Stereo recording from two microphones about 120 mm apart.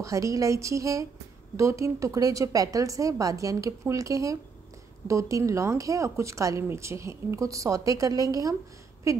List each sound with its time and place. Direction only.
0.0 s speech: 25° right (ahead or behind)